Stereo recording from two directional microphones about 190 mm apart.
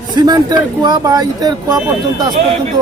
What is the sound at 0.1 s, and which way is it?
Speech, 20° right (ahead or behind).